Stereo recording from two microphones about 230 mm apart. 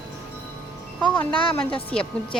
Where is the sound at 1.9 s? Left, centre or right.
Centre.